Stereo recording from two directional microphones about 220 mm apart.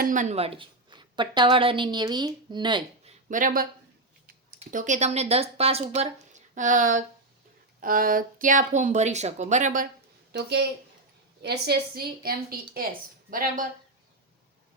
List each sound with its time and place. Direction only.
0.0 s a woman's voice: 35° right (ahead or behind)
3.2 s speech: 35° right (ahead or behind)
10.3 s a woman's voice: 50° right (ahead or behind)